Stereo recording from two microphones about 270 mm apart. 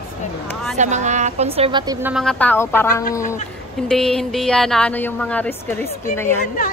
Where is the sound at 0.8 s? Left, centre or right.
Right.